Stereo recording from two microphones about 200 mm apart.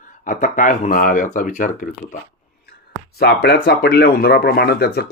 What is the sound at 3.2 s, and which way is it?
Speech, 55° left (ahead or behind).